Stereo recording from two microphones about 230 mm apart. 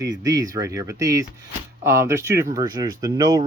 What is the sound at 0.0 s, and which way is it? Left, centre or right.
Speech, centre.